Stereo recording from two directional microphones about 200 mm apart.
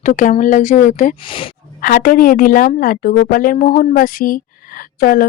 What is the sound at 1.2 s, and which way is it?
Speech, 25° left (ahead or behind).